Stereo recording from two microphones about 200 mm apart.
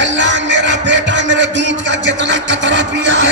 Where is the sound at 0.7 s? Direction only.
65° right (ahead or behind).